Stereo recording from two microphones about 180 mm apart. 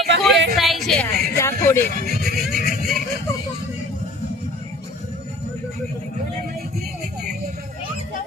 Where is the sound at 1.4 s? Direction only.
15° left (ahead or behind).